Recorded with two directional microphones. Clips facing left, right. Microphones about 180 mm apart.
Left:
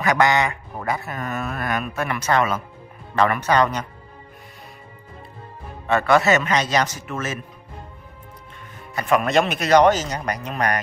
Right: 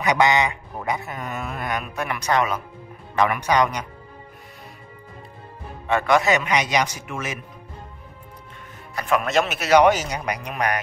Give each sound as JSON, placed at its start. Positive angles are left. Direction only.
{"t": 0.0, "sound": "speech", "side_deg": -20}
{"t": 5.9, "sound": "speech", "side_deg": -15}
{"t": 8.9, "sound": "speech", "side_deg": 0}